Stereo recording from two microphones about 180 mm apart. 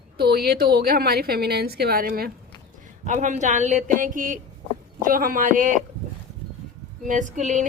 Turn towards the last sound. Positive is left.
turn(degrees=-45)  # may be behind; listen again after turning